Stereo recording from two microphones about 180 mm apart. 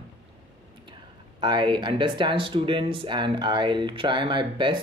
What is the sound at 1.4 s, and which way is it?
Speech, 25° right (ahead or behind).